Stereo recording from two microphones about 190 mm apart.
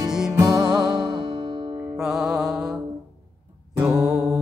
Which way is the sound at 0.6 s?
Centre (ahead or behind).